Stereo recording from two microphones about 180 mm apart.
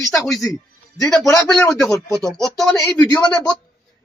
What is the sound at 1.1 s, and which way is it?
Speech, centre (ahead or behind).